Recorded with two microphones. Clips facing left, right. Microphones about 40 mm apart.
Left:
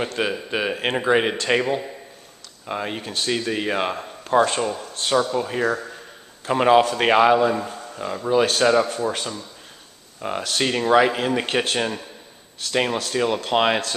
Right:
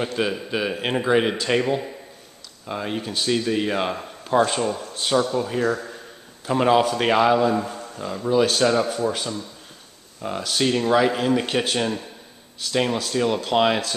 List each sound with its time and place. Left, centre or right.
0.2 s speech: centre